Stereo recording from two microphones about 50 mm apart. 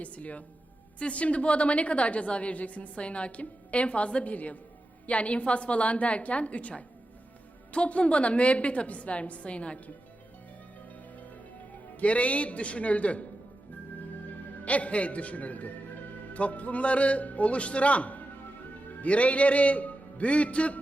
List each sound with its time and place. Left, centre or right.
0.0 s a woman's voice: left
11.9 s a woman's voice: left
14.6 s a woman's voice: left